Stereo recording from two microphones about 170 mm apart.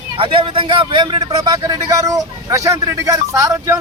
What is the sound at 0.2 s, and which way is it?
A man's voice, 30° right (ahead or behind).